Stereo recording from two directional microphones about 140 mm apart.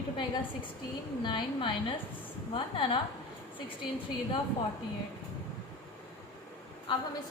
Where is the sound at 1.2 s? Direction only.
35° left (ahead or behind).